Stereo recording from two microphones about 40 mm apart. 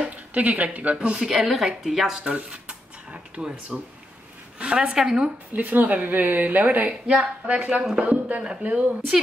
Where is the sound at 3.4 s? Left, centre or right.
Right.